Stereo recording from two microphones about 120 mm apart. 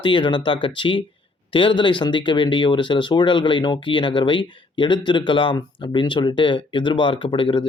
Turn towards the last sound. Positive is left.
turn(degrees=45)  # may be behind; listen again after turning